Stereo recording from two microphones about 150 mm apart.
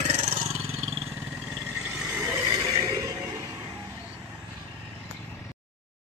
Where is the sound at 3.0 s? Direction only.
20° right (ahead or behind).